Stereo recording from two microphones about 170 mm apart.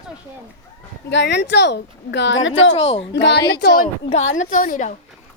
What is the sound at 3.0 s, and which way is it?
Speech, 90° left.